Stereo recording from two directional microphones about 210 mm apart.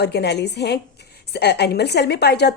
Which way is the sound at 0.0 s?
50° left (ahead or behind).